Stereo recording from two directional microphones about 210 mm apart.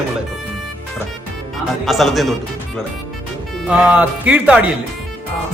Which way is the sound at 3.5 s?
5° right (ahead or behind).